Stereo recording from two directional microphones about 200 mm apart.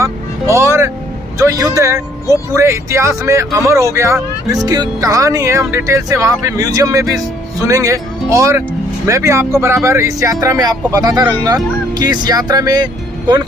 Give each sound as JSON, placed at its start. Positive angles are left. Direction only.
{"t": 0.0, "sound": "vehicle", "side_deg": -15}
{"t": 1.4, "sound": "speech", "side_deg": -15}